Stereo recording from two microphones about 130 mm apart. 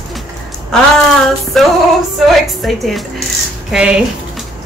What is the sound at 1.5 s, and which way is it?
Music, centre (ahead or behind).